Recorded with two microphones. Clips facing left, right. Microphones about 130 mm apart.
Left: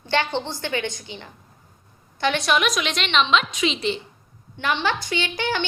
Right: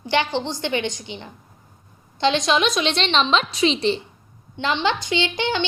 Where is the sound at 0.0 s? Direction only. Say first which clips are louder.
Right 2 dB; 15° right (ahead or behind); by 4.0 s 35° right (ahead or behind).